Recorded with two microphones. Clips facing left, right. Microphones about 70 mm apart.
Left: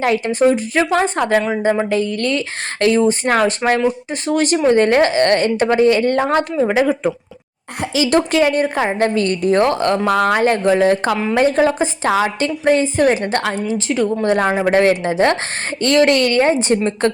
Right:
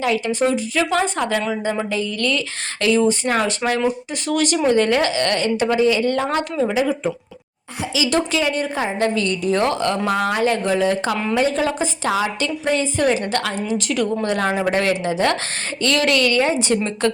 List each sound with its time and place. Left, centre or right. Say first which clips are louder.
0.0 s a woman's voice: left 4 dB; left
6.2 s a woman's voice: left 4 dB; left
6.7 s a woman's voice: left 4 dB; left
10.1 s a woman's voice: left 5 dB; left